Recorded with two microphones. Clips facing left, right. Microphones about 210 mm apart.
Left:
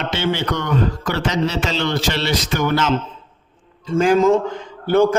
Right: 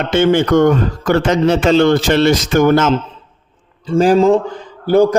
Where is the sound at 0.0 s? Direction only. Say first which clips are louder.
Right 9 dB; 50° right (ahead or behind).